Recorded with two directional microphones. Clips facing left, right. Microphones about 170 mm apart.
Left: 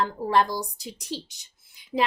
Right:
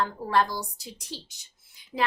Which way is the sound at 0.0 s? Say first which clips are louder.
Left 2 dB; 15° left (ahead or behind).